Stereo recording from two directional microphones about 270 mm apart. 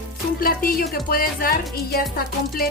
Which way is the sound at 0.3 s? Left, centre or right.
Left.